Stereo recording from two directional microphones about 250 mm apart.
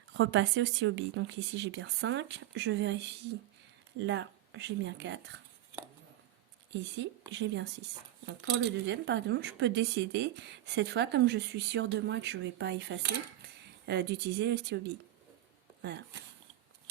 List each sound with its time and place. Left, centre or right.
0.1 s speech: right
7.0 s speech: right